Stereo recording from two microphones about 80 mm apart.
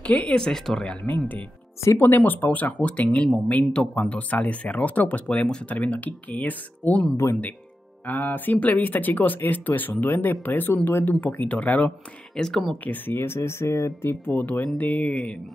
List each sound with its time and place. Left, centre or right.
0.0 s speech: centre
1.0 s speech: left
8.1 s speech: left
12.4 s speech: centre
12.8 s speech: left